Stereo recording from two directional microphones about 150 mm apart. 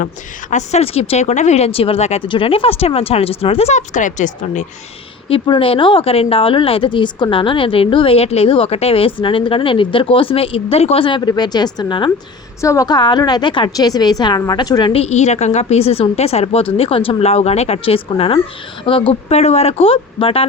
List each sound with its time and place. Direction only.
0.5 s speech: 45° left (ahead or behind)
2.2 s a woman's voice: 35° left (ahead or behind); by 4.6 s 55° left (ahead or behind)
5.3 s a woman's voice: 35° left (ahead or behind)
15.0 s a woman's voice: 50° left (ahead or behind)